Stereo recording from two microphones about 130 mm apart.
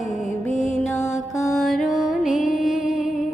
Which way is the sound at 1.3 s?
Centre (ahead or behind).